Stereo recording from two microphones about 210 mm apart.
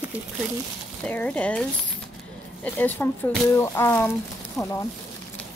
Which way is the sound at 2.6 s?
10° left (ahead or behind).